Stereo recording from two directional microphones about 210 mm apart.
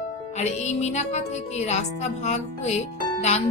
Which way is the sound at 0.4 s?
35° left (ahead or behind).